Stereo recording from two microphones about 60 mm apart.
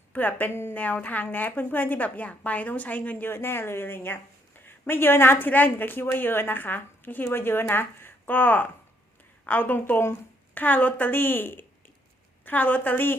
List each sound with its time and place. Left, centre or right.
0.1 s a woman's voice: left
0.5 s speech: left
0.8 s a woman's voice: left